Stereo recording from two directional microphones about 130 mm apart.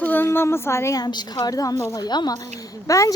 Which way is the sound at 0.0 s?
15° left (ahead or behind).